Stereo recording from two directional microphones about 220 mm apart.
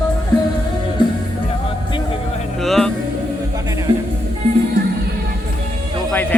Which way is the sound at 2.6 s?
Centre (ahead or behind).